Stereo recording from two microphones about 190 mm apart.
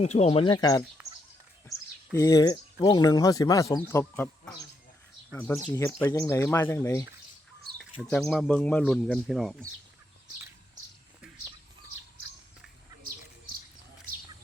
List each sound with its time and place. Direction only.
0.0 s speech: 35° left (ahead or behind)
2.1 s speech: 15° left (ahead or behind)
5.6 s speech: 20° left (ahead or behind)
8.0 s speech: centre (ahead or behind)